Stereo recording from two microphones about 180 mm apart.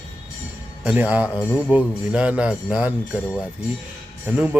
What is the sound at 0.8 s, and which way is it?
Speech, 5° right (ahead or behind).